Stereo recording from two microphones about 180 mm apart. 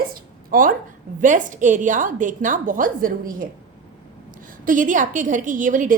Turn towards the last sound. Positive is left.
turn(degrees=-45)  # may be behind; listen again after turning